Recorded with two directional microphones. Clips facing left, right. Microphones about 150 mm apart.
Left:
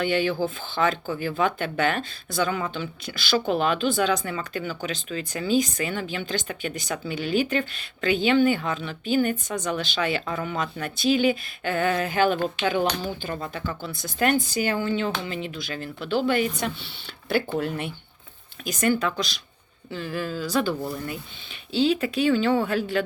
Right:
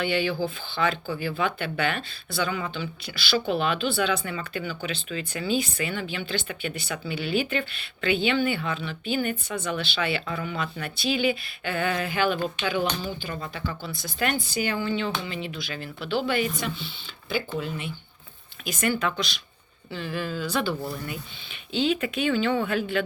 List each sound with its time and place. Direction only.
0.0 s speech: 45° left (ahead or behind)
17.2 s speech: 60° left (ahead or behind)
18.6 s speech: 40° left (ahead or behind)